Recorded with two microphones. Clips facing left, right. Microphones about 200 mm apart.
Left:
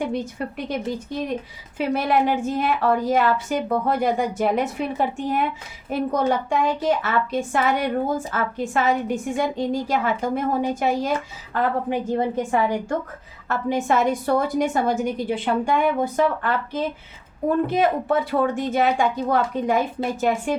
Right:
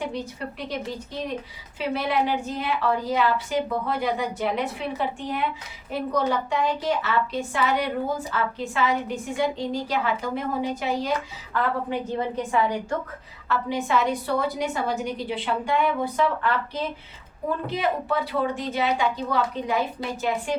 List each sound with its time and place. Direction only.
0.1 s a woman's voice: 55° left (ahead or behind)